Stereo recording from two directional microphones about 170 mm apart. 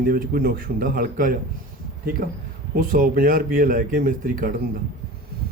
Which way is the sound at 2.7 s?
55° right (ahead or behind).